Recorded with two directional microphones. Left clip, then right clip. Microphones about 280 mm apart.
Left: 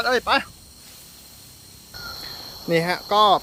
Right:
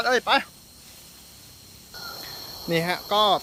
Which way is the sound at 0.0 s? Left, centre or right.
Centre.